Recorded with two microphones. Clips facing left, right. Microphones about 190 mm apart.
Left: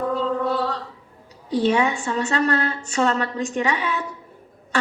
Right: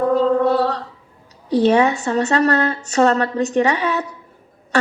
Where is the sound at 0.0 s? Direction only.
45° right (ahead or behind).